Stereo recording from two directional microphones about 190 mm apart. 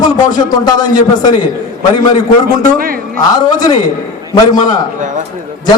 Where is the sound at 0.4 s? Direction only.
20° left (ahead or behind).